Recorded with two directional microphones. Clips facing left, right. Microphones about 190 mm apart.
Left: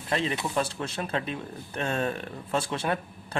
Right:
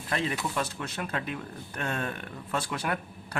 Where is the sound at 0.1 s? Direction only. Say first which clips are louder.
Left 3 dB; 25° left (ahead or behind).